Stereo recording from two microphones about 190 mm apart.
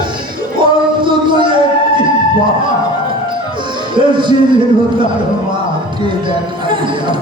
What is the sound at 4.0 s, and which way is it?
Music, 25° right (ahead or behind).